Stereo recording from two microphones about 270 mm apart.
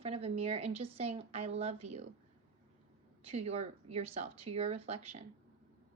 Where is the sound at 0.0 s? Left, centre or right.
Right.